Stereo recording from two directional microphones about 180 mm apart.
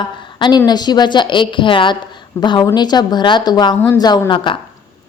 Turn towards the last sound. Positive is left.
turn(degrees=25)  # may be behind; listen again after turning